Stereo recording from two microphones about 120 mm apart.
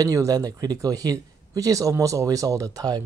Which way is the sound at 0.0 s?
30° right (ahead or behind).